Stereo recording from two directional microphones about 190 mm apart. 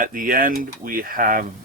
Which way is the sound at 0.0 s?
45° right (ahead or behind).